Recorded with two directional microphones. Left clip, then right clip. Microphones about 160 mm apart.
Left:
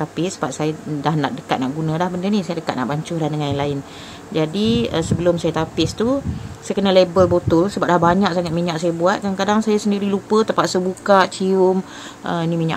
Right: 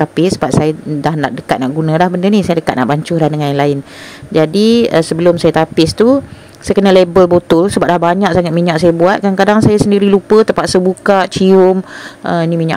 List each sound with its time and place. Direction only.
0.0 s speech: 40° right (ahead or behind)